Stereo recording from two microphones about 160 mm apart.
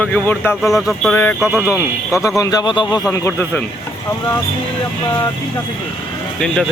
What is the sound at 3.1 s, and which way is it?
Speech, 20° left (ahead or behind).